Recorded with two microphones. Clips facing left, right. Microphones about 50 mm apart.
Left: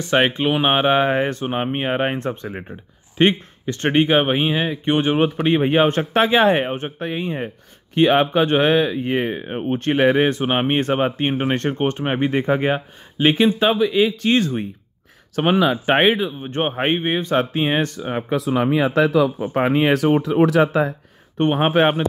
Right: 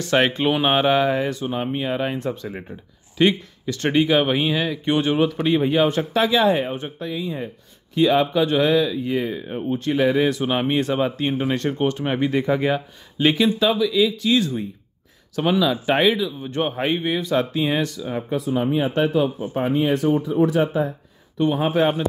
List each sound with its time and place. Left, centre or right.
0.0 s speech: left
18.3 s speech: left
19.5 s speech: left
21.4 s a man's voice: left